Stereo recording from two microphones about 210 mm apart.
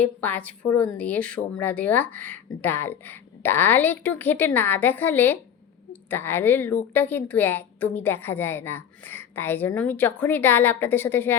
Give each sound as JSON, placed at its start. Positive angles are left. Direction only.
{"t": 0.0, "sound": "a woman's voice", "side_deg": 10}